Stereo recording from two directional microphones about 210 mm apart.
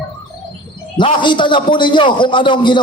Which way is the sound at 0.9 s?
20° left (ahead or behind).